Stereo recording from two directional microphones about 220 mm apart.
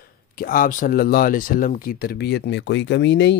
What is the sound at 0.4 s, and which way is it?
Speech, 40° left (ahead or behind).